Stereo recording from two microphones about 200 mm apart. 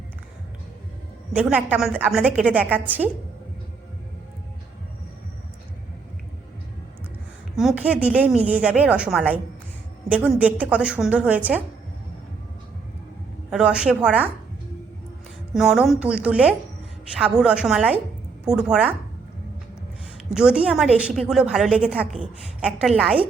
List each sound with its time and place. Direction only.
1.4 s a woman's voice: 5° right (ahead or behind)
7.5 s a woman's voice: centre (ahead or behind)
13.5 s a woman's voice: 5° right (ahead or behind)
15.5 s a woman's voice: centre (ahead or behind)
20.3 s a woman's voice: 5° right (ahead or behind)